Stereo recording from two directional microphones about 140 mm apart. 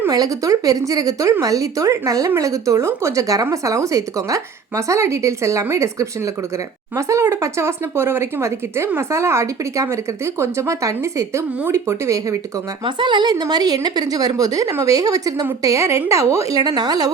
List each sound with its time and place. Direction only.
0.1 s speech: 25° right (ahead or behind)
12.8 s a woman's voice: 35° right (ahead or behind)